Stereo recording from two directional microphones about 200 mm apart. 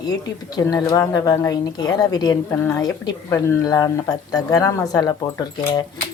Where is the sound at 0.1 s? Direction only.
20° left (ahead or behind).